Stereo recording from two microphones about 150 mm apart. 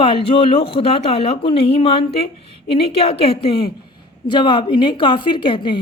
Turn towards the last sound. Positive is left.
turn(degrees=35)  # may be behind; listen again after turning